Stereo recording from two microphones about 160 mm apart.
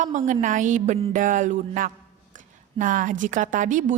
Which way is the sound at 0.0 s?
50° right (ahead or behind).